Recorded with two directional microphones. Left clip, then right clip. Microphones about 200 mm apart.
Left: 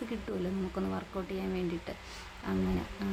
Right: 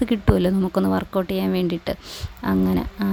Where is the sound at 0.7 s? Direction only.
50° right (ahead or behind).